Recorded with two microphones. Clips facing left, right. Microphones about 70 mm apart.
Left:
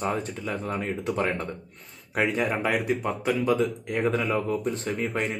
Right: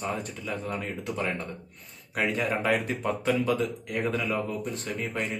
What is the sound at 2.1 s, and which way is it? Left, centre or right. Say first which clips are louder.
Speech: left 3 dB; left.